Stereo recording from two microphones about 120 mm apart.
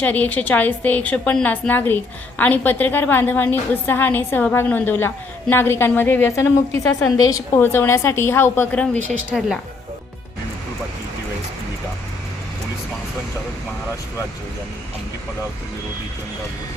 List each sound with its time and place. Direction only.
0.0 s a woman's voice: 15° left (ahead or behind); by 7.6 s 30° left (ahead or behind)
7.6 s a woman's voice: 20° left (ahead or behind)
9.3 s a woman's voice: 5° left (ahead or behind)